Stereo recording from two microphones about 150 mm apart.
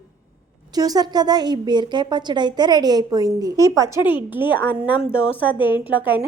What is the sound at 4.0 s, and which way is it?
Speech, 30° left (ahead or behind).